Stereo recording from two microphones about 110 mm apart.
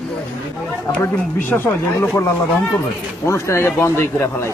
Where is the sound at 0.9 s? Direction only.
20° left (ahead or behind).